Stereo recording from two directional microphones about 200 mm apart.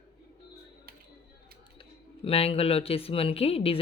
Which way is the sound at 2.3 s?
30° left (ahead or behind).